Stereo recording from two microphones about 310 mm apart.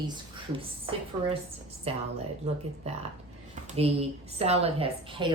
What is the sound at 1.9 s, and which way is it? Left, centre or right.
Speech, centre.